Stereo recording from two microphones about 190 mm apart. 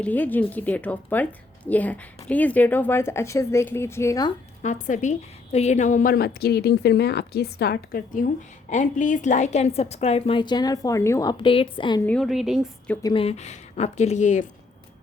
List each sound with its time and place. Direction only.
0.0 s a woman's voice: 10° left (ahead or behind)
4.6 s a woman's voice: 40° left (ahead or behind); by 12.0 s 25° left (ahead or behind)
12.0 s a woman's voice: 5° left (ahead or behind)
13.0 s speech: 20° left (ahead or behind)
13.2 s a woman's voice: 35° left (ahead or behind)